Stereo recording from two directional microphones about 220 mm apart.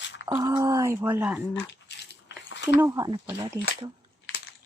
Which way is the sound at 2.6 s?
15° right (ahead or behind).